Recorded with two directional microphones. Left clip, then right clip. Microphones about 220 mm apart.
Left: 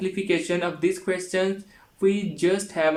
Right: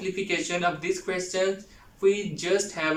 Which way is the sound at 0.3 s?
35° left (ahead or behind).